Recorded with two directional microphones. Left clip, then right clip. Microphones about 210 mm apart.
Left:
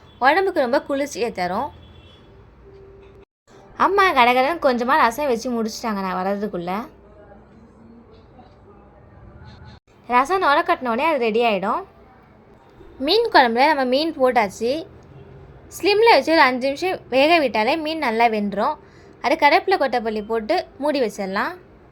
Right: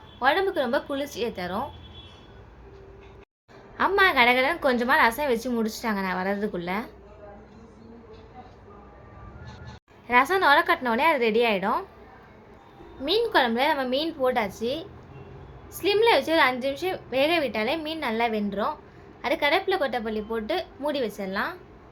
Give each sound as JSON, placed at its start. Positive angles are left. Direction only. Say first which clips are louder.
{"t": 0.2, "sound": "a woman's voice", "louder": "left 6 dB", "side_deg": 35}
{"t": 3.8, "sound": "a woman's voice", "louder": "left 5 dB", "side_deg": 30}
{"t": 10.1, "sound": "a woman's voice", "louder": "left 2 dB", "side_deg": 15}
{"t": 13.0, "sound": "a woman's voice", "louder": "left 7 dB", "side_deg": 35}